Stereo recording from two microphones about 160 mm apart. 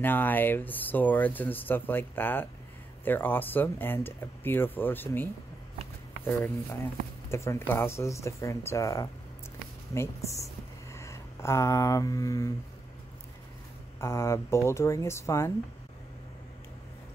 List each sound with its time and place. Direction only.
0.0 s speech: 10° left (ahead or behind)
13.9 s speech: 15° left (ahead or behind)